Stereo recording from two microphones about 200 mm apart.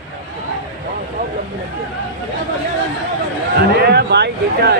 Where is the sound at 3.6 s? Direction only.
55° right (ahead or behind).